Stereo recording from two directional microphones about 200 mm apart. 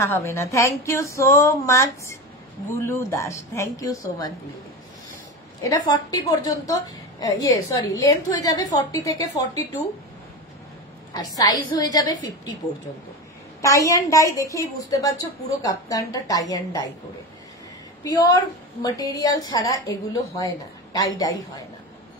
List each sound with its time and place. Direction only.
0.0 s a woman's voice: 15° left (ahead or behind)
5.6 s a woman's voice: 20° left (ahead or behind)
11.1 s a woman's voice: 20° left (ahead or behind)
13.6 s a woman's voice: 15° left (ahead or behind)
18.0 s a woman's voice: 20° left (ahead or behind)